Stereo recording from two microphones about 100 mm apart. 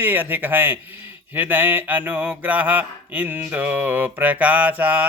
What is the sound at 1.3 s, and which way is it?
Mantra, 20° right (ahead or behind).